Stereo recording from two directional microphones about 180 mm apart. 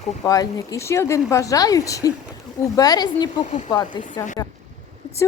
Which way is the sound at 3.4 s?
40° left (ahead or behind).